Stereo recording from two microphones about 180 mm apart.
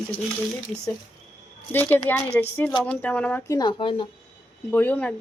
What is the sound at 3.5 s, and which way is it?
Speech, 25° left (ahead or behind).